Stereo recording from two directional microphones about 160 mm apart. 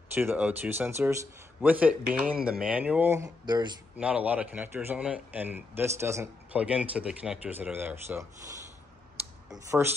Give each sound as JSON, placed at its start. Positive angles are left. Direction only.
{"t": 0.1, "sound": "a man's voice", "side_deg": -15}
{"t": 4.0, "sound": "a man's voice", "side_deg": -10}
{"t": 9.5, "sound": "speech", "side_deg": -20}